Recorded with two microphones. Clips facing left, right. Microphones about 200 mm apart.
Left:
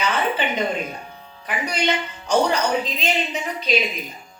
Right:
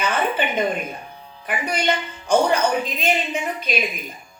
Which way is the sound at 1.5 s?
50° right (ahead or behind).